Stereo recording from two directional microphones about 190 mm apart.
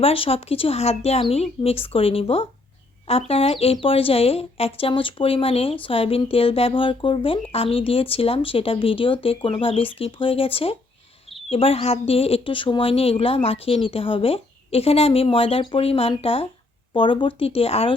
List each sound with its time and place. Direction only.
0.0 s speech: 30° left (ahead or behind)